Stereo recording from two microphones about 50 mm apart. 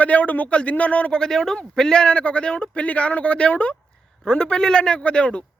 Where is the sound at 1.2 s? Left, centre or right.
Centre.